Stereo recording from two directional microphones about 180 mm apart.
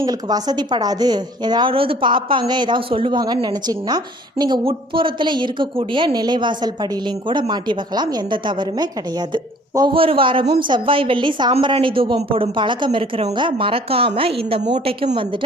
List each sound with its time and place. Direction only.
0.0 s a woman's voice: 20° right (ahead or behind)